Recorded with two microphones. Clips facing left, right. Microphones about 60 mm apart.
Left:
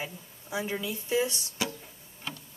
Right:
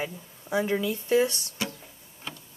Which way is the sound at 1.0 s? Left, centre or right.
Right.